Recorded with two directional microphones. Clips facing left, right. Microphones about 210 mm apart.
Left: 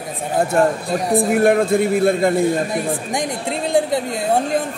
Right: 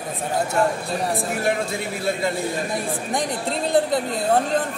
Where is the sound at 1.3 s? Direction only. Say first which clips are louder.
Left 9 dB; 55° left (ahead or behind).